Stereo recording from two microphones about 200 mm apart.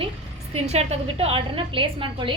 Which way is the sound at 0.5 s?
35° right (ahead or behind).